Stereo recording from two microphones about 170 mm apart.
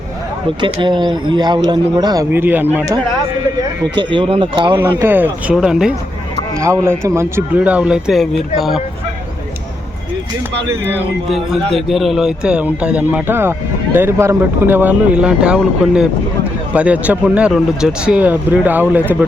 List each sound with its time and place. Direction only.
0.6 s speech: 25° right (ahead or behind)
2.3 s speech: 10° right (ahead or behind)
3.9 s speech: 30° right (ahead or behind)
4.8 s speech: 15° right (ahead or behind)
6.6 s speech: 15° right (ahead or behind)
11.3 s a man's voice: centre (ahead or behind)